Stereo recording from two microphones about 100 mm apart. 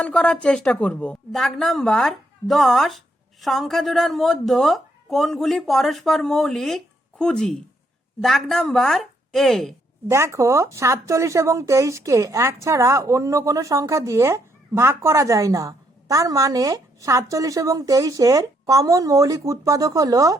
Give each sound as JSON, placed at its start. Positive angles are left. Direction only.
{"t": 0.0, "sound": "a woman's voice", "side_deg": 10}
{"t": 10.1, "sound": "speech", "side_deg": -25}